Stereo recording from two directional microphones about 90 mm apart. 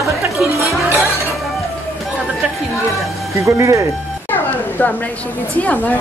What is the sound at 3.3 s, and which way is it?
Speech, 35° right (ahead or behind).